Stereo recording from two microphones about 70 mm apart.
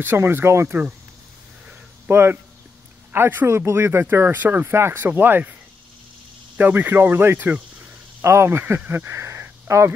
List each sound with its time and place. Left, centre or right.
0.0 s speech: right
2.0 s speech: right
6.6 s speech: right
8.2 s speech: right